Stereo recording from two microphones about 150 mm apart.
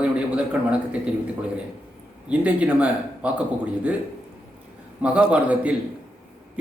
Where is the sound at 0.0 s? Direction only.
10° right (ahead or behind).